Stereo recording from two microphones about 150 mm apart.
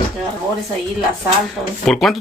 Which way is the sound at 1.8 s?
Centre (ahead or behind).